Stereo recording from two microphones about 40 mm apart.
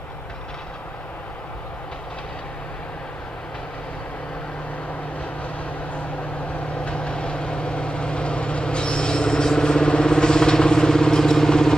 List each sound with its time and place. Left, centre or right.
6.8 s vehicle: left